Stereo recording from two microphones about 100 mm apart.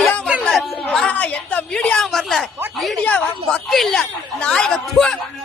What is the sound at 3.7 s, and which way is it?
A woman's voice, 5° left (ahead or behind).